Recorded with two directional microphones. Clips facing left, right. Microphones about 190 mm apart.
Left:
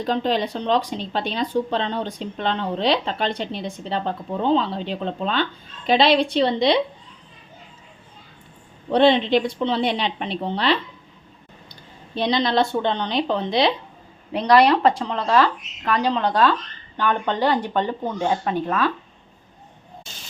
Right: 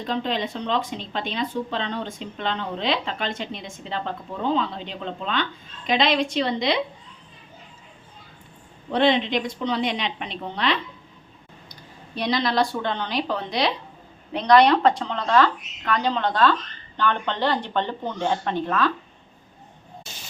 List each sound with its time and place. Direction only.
0.0 s speech: 40° left (ahead or behind)
8.9 s a woman's voice: 30° left (ahead or behind)
14.3 s speech: 5° left (ahead or behind)